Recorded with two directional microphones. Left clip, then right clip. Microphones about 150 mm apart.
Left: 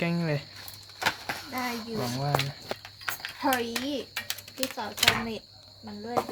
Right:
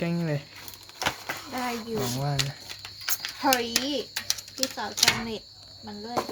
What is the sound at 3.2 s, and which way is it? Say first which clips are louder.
Speech: right 3 dB; 25° right (ahead or behind).